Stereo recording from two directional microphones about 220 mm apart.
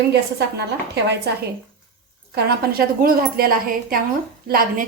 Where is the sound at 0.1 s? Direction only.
50° right (ahead or behind).